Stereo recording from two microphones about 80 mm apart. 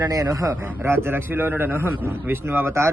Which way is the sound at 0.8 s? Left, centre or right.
Right.